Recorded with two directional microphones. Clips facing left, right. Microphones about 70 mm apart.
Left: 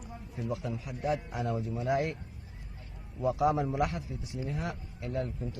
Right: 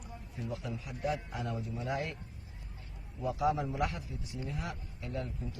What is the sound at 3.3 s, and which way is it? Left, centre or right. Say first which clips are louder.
A man's voice: left 3 dB; left.